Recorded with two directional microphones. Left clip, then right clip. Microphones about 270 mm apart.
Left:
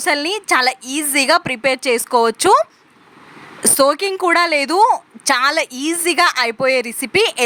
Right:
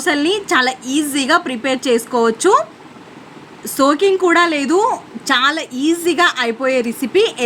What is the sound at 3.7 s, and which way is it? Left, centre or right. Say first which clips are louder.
A woman's voice: right 2 dB; left.